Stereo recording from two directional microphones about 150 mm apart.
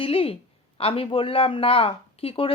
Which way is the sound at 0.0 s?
40° left (ahead or behind).